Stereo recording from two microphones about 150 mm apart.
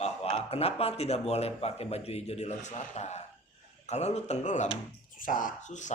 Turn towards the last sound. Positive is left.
turn(degrees=55)  # may be behind; listen again after turning